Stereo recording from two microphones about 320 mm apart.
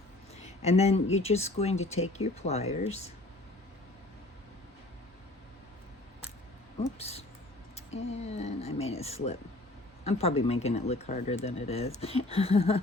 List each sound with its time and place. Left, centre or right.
0.3 s a sound: centre
1.2 s speech: centre
7.0 s speech: centre